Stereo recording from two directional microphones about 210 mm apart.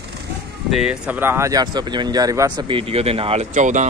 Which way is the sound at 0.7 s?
5° right (ahead or behind).